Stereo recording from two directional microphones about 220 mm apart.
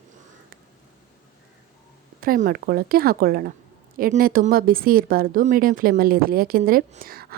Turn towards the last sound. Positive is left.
turn(degrees=-40)  # may be behind; listen again after turning